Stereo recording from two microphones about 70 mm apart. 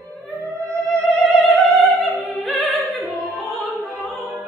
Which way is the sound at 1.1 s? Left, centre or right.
Centre.